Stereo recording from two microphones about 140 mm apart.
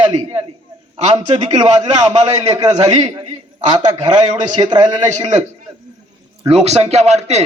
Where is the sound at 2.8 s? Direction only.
55° right (ahead or behind).